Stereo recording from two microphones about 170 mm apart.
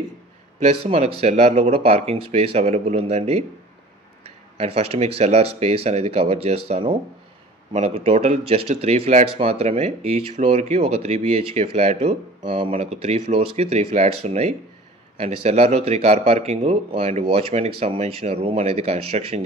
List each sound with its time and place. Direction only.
0.6 s speech: 40° right (ahead or behind)
4.6 s speech: 35° right (ahead or behind)